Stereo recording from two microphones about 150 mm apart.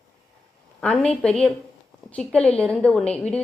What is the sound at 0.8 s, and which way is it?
A woman's voice, 5° left (ahead or behind).